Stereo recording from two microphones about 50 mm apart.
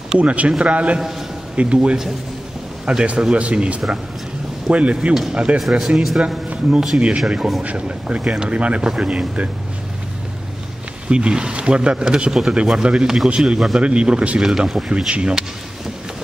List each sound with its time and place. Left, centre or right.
0.2 s speech: right
3.1 s speech: right
5.8 s speech: centre
6.2 s a man's voice: right
11.1 s speech: centre
13.7 s speech: right